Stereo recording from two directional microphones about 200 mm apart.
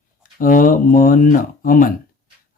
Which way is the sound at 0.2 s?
40° left (ahead or behind).